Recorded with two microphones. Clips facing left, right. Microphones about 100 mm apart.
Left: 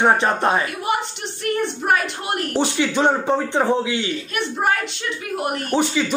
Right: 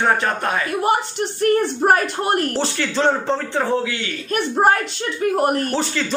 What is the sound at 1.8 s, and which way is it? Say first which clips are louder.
Speech: right 4 dB; 40° right (ahead or behind).